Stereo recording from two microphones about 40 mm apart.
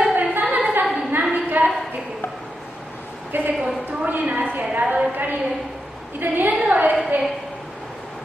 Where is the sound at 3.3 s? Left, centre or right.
Right.